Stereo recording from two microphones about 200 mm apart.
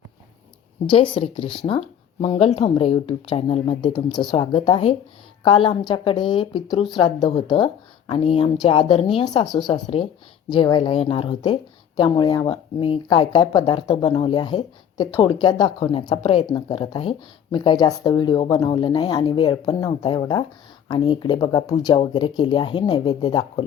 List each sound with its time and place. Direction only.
0.9 s a woman's voice: 25° left (ahead or behind)